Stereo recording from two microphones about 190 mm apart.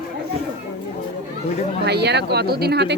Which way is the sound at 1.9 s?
60° right (ahead or behind).